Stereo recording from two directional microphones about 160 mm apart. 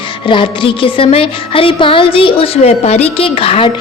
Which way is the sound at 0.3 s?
30° left (ahead or behind).